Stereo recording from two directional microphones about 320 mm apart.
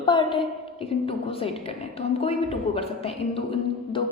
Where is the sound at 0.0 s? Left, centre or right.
Centre.